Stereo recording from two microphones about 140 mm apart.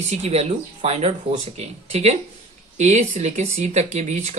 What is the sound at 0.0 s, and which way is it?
Speech, 55° right (ahead or behind).